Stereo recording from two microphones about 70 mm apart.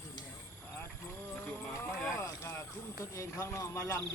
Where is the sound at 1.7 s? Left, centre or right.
Left.